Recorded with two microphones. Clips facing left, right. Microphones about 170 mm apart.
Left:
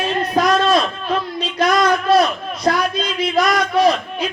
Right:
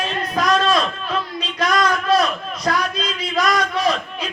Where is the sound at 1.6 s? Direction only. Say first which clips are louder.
Left 3 dB; 30° left (ahead or behind).